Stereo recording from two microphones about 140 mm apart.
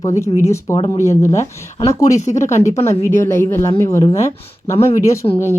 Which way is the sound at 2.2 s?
60° left (ahead or behind).